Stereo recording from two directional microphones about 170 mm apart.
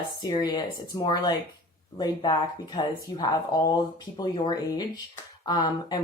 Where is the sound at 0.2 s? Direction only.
25° left (ahead or behind).